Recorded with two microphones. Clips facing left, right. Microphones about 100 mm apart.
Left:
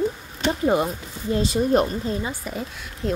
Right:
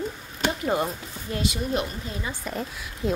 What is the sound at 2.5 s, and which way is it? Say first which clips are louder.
Speech: left 1 dB; centre (ahead or behind).